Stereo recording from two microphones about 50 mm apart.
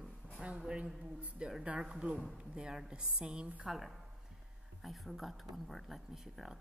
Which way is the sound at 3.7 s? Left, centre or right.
Centre.